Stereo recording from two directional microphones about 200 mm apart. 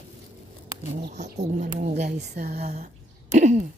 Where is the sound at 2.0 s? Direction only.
50° right (ahead or behind).